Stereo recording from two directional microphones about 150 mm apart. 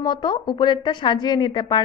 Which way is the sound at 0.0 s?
30° left (ahead or behind).